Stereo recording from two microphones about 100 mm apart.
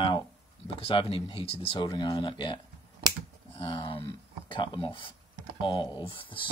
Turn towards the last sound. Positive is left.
turn(degrees=60)  # may be behind; listen again after turning